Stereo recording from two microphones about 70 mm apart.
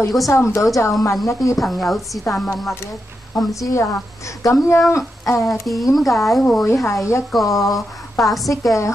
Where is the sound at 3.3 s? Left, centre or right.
Left.